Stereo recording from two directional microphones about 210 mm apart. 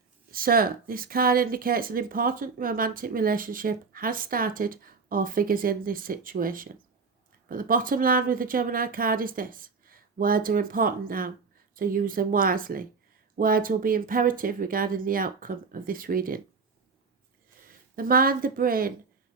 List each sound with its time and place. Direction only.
0.3 s speech: 45° right (ahead or behind)
17.7 s speech: 45° right (ahead or behind)